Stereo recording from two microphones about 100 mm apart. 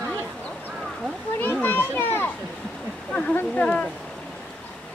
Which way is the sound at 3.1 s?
15° left (ahead or behind).